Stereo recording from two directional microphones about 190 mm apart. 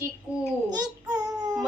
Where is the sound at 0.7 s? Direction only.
20° right (ahead or behind).